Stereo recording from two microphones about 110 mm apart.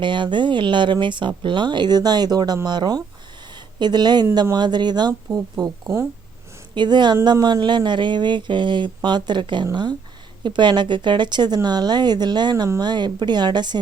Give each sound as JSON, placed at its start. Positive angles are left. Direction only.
{"t": 0.0, "sound": "a woman's voice", "side_deg": -45}